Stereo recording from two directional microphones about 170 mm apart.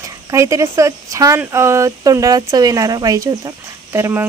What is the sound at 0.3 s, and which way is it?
Speech, 15° right (ahead or behind).